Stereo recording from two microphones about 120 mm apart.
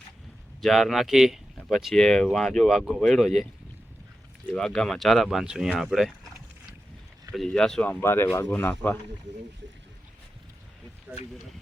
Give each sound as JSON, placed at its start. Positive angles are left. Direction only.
{"t": 0.6, "sound": "speech", "side_deg": 0}
{"t": 4.5, "sound": "speech", "side_deg": 5}
{"t": 7.3, "sound": "speech", "side_deg": 5}
{"t": 7.9, "sound": "speech", "side_deg": 15}